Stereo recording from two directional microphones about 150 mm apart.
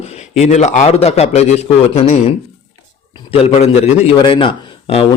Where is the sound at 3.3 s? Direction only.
40° left (ahead or behind).